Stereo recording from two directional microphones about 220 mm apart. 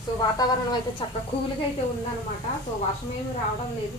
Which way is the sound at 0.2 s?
15° left (ahead or behind).